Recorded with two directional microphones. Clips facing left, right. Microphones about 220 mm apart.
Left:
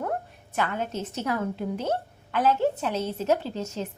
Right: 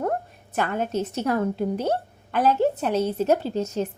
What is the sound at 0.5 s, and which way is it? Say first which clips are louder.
A woman's voice: right 4 dB; 45° right (ahead or behind).